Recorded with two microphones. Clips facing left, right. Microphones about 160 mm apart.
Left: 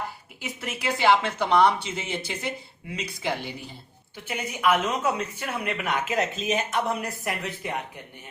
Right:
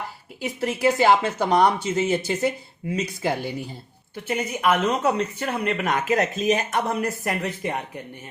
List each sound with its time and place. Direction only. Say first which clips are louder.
0.3 s speech: right 10 dB; 45° right (ahead or behind)